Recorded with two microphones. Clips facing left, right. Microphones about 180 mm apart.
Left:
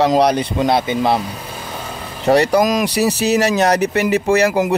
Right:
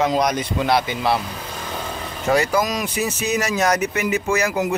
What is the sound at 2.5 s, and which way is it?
Speech, 50° left (ahead or behind).